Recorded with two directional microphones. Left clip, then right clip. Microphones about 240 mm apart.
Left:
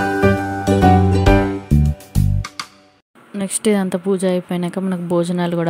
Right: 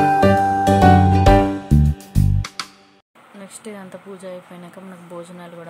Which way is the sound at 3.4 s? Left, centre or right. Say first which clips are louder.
Left 17 dB; left.